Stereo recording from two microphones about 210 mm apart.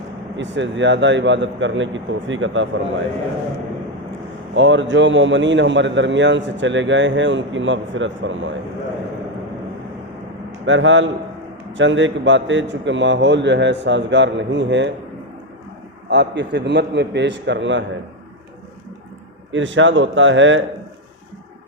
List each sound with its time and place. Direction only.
0.3 s a man's voice: 60° right (ahead or behind)
4.5 s a man's voice: 60° right (ahead or behind)
10.7 s a man's voice: 65° right (ahead or behind)
16.0 s a man's voice: 55° right (ahead or behind)
19.5 s a man's voice: 60° right (ahead or behind)